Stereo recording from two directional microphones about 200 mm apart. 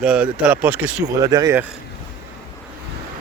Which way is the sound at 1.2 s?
20° right (ahead or behind).